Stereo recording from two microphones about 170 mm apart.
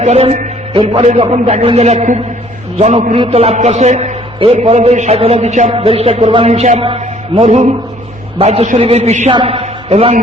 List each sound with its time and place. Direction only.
0.0 s a man's voice: 40° right (ahead or behind)
9.3 s a man's voice: 30° right (ahead or behind)